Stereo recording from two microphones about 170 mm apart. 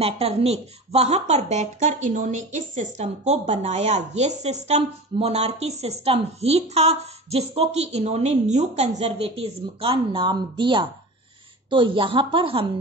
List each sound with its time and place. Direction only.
0.0 s speech: 35° right (ahead or behind)